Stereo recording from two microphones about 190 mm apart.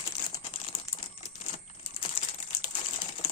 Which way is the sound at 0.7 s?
35° left (ahead or behind).